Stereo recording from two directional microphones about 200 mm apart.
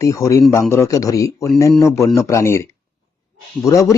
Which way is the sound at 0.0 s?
15° left (ahead or behind).